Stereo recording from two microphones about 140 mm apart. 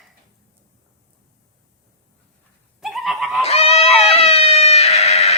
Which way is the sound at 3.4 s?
45° left (ahead or behind).